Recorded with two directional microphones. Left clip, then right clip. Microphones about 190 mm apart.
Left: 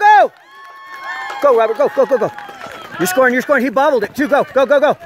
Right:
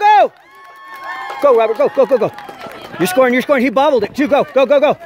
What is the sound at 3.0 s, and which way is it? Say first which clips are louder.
Speech: right 1 dB; 5° left (ahead or behind).